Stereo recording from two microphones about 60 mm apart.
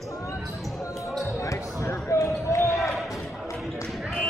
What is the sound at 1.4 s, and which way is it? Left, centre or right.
Basketball bounce, left.